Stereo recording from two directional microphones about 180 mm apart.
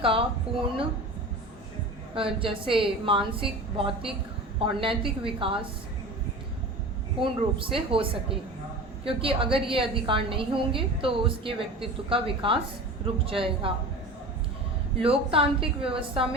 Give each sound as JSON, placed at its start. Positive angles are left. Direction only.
{"t": 0.0, "sound": "a woman's voice", "side_deg": -30}
{"t": 2.1, "sound": "a woman's voice", "side_deg": -30}
{"t": 7.2, "sound": "a woman's voice", "side_deg": -30}
{"t": 15.0, "sound": "a woman's voice", "side_deg": -30}